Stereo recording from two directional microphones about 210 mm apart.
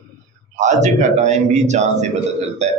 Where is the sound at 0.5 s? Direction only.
35° right (ahead or behind).